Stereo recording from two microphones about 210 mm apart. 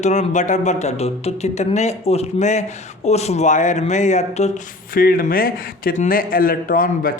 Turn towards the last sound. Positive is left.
turn(degrees=40)  # may be behind; listen again after turning